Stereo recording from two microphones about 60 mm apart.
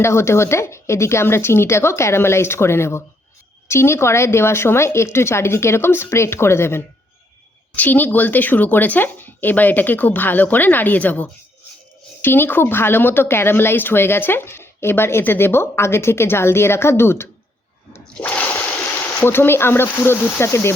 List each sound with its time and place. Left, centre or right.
0.0 s a woman's voice: left
7.8 s speech: left
12.2 s a woman's voice: left
18.2 s water: left
18.9 s speech: left